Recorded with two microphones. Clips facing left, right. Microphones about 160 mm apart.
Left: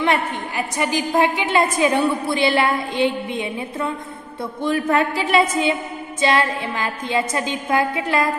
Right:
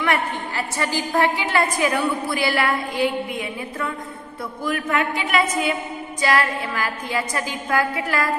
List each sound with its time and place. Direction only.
0.0 s a woman's voice: 20° left (ahead or behind)